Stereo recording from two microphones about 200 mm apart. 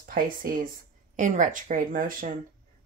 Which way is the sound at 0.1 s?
45° right (ahead or behind).